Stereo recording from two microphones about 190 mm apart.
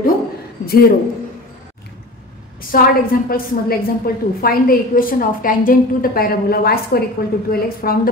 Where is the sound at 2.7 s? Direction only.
50° left (ahead or behind).